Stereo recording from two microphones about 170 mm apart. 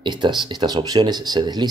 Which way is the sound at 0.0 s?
25° right (ahead or behind).